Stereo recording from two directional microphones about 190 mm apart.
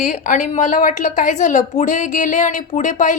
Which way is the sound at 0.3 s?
40° left (ahead or behind).